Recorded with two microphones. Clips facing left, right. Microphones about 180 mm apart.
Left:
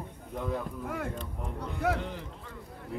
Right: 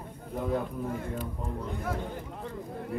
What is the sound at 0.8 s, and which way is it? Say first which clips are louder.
Speech: right 2 dB; 70° left (ahead or behind).